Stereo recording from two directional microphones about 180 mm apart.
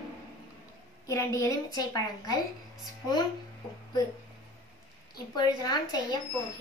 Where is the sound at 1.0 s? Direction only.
15° left (ahead or behind).